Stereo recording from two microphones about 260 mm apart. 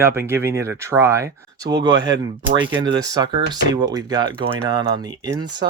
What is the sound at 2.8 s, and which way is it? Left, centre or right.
Speech, centre.